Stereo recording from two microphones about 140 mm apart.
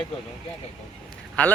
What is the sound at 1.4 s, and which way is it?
Speech, 10° left (ahead or behind).